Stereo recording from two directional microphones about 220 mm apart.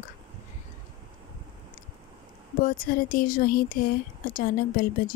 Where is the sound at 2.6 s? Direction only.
40° left (ahead or behind).